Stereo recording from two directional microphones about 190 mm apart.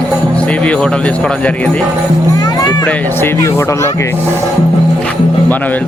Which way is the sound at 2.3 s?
20° left (ahead or behind).